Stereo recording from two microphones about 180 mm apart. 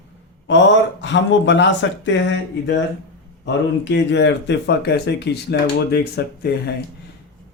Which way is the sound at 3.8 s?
80° left.